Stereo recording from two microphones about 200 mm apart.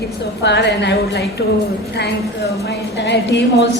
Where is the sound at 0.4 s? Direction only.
60° left (ahead or behind).